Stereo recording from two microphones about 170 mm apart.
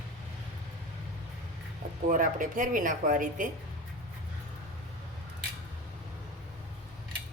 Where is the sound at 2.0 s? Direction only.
50° right (ahead or behind).